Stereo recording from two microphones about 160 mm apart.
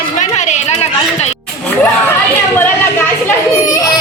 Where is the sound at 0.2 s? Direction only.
45° left (ahead or behind).